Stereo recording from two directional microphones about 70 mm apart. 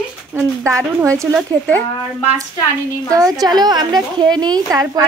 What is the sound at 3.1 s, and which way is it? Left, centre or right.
Speech, right.